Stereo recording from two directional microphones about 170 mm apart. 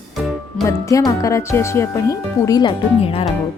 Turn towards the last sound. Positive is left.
turn(degrees=35)  # may be behind; listen again after turning